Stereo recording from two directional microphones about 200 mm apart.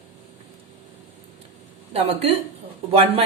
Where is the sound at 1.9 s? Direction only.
30° right (ahead or behind).